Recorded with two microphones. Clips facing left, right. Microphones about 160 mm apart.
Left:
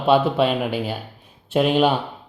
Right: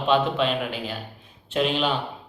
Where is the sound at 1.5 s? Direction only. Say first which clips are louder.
Left 6 dB; 50° left (ahead or behind).